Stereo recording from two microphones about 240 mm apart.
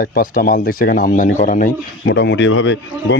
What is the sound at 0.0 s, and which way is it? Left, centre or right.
A man's voice, left.